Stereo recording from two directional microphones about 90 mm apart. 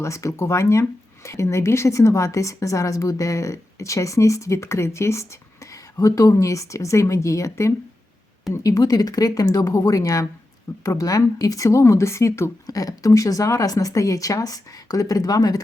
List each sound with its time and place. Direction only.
0.0 s speech: 35° left (ahead or behind)